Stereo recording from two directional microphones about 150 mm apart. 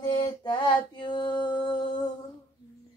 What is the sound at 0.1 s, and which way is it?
Mantra, 30° left (ahead or behind).